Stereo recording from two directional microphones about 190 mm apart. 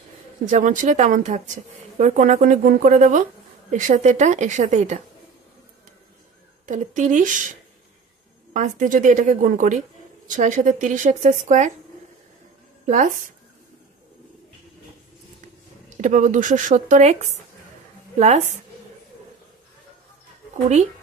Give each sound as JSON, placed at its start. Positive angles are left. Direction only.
{"t": 0.5, "sound": "a woman's voice", "side_deg": -40}
{"t": 6.6, "sound": "a woman's voice", "side_deg": -40}
{"t": 8.5, "sound": "a woman's voice", "side_deg": -45}
{"t": 12.8, "sound": "speech", "side_deg": -40}
{"t": 16.0, "sound": "a woman's voice", "side_deg": -40}